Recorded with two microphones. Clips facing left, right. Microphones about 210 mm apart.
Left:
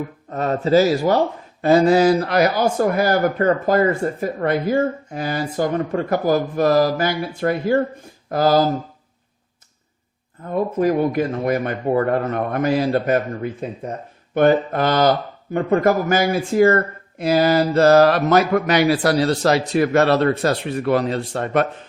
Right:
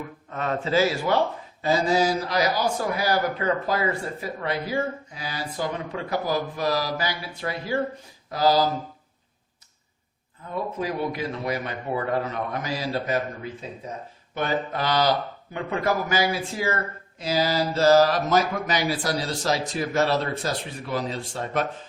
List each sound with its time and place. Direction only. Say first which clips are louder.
0.3 s speech: left 8 dB; 40° left (ahead or behind)
1.6 s speech: left 8 dB; 60° left (ahead or behind)
10.4 s speech: left 10 dB; 50° left (ahead or behind)